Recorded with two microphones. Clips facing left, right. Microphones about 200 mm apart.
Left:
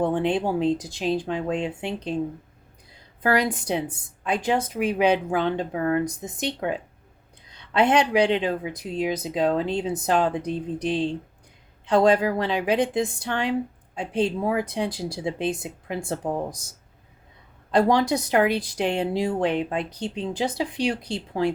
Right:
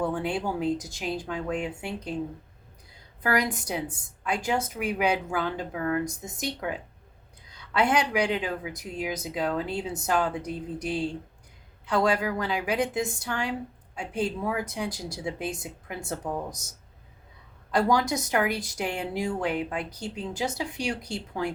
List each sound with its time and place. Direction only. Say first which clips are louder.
0.0 s speech: left 5 dB; 30° left (ahead or behind)
3.2 s speech: left 4 dB; 30° left (ahead or behind)
17.7 s speech: left 4 dB; 30° left (ahead or behind)